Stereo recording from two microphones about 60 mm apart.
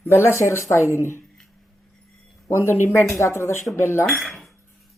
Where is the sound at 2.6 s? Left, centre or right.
Left.